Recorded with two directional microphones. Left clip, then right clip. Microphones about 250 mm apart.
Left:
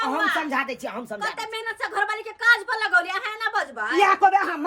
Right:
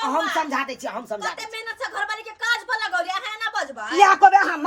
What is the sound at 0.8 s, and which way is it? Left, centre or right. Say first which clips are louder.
Speech: right 1 dB; centre.